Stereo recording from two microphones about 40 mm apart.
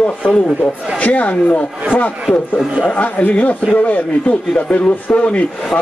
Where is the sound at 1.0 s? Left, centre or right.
Left.